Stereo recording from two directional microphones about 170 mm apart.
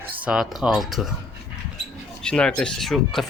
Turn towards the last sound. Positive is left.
turn(degrees=0)  # may be behind; listen again after turning